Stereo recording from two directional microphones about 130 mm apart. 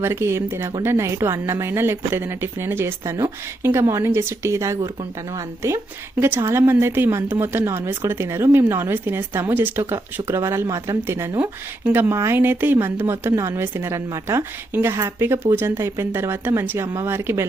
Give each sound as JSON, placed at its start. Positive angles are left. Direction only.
{"t": 0.0, "sound": "a woman's voice", "side_deg": -20}